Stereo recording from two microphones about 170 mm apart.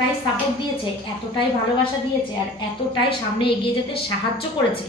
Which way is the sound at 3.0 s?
30° left (ahead or behind).